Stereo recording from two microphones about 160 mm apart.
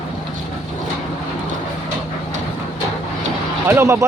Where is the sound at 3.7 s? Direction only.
15° right (ahead or behind).